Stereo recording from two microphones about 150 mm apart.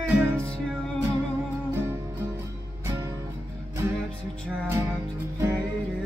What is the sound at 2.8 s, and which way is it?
Music, 20° right (ahead or behind).